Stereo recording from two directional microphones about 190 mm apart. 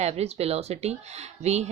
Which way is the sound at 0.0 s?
35° right (ahead or behind).